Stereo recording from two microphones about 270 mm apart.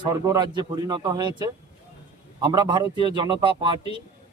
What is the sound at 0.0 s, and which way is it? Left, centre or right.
A man's voice, centre.